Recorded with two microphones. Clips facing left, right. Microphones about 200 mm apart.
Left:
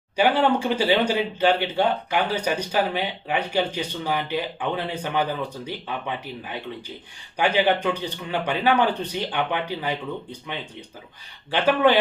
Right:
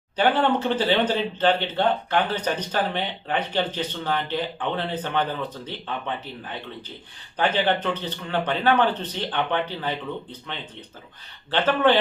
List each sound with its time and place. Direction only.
0.2 s speech: 10° left (ahead or behind)
11.5 s speech: 10° left (ahead or behind)